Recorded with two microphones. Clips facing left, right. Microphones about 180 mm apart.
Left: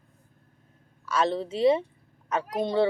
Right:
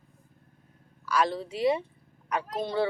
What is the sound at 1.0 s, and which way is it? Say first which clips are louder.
Speech: left 1 dB; 25° left (ahead or behind).